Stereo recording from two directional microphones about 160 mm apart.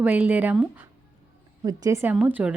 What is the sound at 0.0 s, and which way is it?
Speech, 10° right (ahead or behind).